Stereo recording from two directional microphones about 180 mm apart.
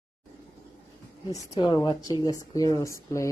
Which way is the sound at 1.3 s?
20° left (ahead or behind).